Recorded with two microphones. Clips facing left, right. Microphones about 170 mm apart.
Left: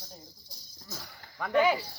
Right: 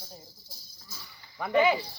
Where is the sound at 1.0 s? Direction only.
50° left (ahead or behind).